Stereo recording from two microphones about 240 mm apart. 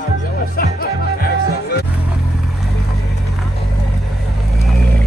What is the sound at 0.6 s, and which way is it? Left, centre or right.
Music, left.